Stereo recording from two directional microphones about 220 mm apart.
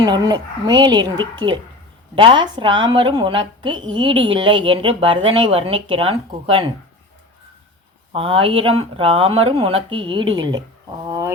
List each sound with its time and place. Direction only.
0.0 s a woman's voice: 20° right (ahead or behind)
8.1 s a woman's voice: 25° right (ahead or behind)